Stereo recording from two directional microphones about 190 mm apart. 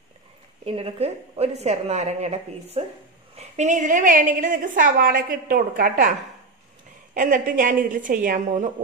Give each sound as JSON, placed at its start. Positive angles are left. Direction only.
{"t": 0.7, "sound": "a woman's voice", "side_deg": -30}
{"t": 7.2, "sound": "a woman's voice", "side_deg": -45}